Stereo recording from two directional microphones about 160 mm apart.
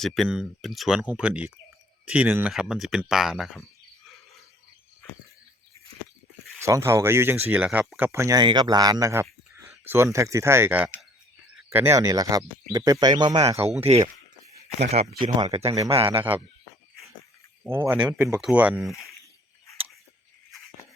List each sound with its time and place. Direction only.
0.0 s speech: centre (ahead or behind)
6.6 s speech: 20° right (ahead or behind)
13.9 s speech: 40° right (ahead or behind)
17.6 s speech: 10° right (ahead or behind)